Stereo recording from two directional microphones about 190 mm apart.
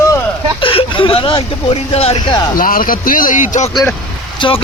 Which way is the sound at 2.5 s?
45° left (ahead or behind).